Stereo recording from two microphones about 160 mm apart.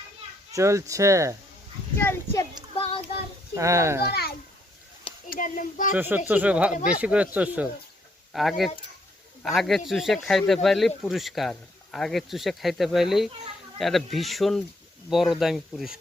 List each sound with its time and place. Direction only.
0.5 s speech: 20° right (ahead or behind)
2.0 s a child's voice: 15° left (ahead or behind)
3.5 s speech: 20° right (ahead or behind)
4.1 s a child's voice: 75° left (ahead or behind)
5.3 s child singing: 55° left (ahead or behind)
5.9 s speech: 10° right (ahead or behind)